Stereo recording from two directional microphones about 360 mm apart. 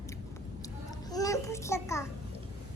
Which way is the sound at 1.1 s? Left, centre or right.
Centre.